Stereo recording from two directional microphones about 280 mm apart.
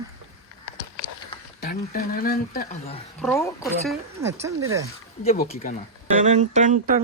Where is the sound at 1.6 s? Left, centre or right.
Left.